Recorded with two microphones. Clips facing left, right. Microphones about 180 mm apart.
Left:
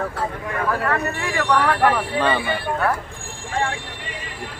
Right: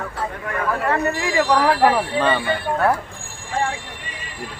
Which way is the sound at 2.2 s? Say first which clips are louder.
Left 1 dB; 5° left (ahead or behind).